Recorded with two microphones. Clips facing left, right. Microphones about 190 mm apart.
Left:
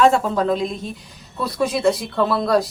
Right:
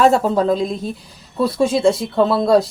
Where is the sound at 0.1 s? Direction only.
35° right (ahead or behind).